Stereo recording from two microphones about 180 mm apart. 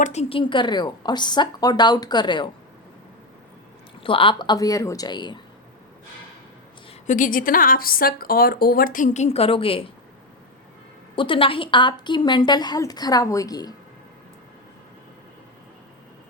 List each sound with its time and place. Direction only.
0.0 s a woman's voice: 40° left (ahead or behind)
4.0 s a woman's voice: 30° left (ahead or behind)
7.1 s a woman's voice: 50° left (ahead or behind); by 9.8 s 30° left (ahead or behind)
11.1 s a woman's voice: 30° left (ahead or behind)